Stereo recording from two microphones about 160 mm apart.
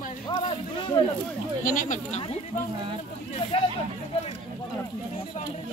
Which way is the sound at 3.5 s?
35° left (ahead or behind).